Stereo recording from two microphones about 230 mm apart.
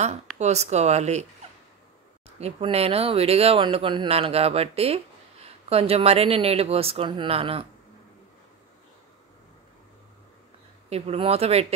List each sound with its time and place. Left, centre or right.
0.4 s speech: right
2.2 s speech: right
10.9 s speech: right